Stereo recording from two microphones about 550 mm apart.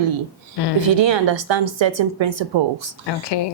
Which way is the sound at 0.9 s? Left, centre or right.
Right.